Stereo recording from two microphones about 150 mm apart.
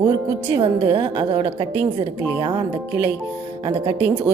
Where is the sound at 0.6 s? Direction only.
35° right (ahead or behind).